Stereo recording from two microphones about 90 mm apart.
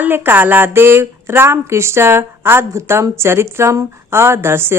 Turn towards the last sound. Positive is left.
turn(degrees=-25)  # may be behind; listen again after turning